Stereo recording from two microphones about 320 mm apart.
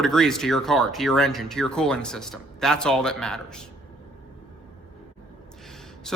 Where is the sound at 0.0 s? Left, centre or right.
Centre.